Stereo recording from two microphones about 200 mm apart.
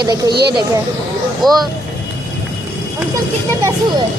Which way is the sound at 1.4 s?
Centre (ahead or behind).